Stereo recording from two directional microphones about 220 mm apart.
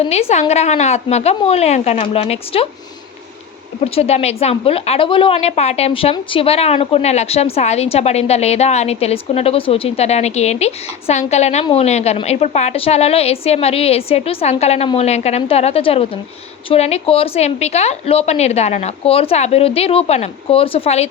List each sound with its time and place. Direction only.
0.1 s a woman's voice: 30° left (ahead or behind)
3.8 s a woman's voice: 25° left (ahead or behind)